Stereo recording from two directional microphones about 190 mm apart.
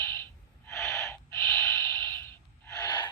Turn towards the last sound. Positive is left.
turn(degrees=20)  # may be behind; listen again after turning